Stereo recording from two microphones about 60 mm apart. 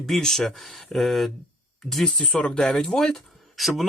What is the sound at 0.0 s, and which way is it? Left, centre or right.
Speech, centre.